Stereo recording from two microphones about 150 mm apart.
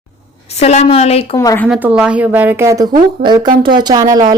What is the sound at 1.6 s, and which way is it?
Speech, 10° right (ahead or behind).